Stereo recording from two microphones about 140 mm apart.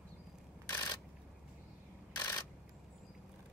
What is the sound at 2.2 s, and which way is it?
Camera, 15° left (ahead or behind).